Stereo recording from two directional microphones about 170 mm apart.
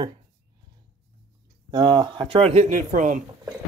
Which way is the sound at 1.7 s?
25° right (ahead or behind).